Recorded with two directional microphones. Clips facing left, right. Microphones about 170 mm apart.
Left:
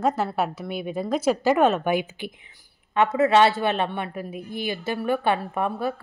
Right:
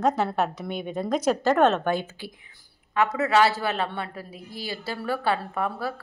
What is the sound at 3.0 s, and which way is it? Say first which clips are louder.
A woman's voice: left 3 dB; 25° left (ahead or behind).